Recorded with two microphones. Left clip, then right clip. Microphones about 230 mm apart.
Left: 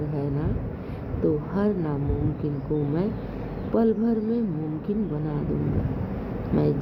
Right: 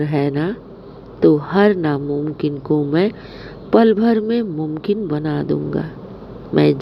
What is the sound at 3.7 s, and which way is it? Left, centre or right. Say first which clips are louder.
Speech: right 10 dB; right.